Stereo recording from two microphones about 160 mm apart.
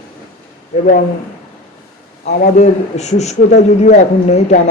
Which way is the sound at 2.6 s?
45° left (ahead or behind).